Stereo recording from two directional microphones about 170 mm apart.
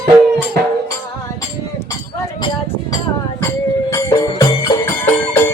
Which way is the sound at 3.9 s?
20° left (ahead or behind).